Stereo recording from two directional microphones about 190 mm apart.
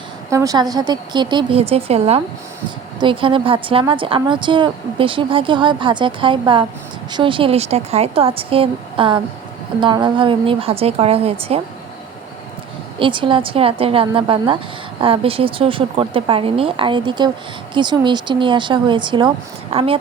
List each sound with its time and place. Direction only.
0.3 s a woman's voice: 15° right (ahead or behind)
13.0 s speech: 25° right (ahead or behind)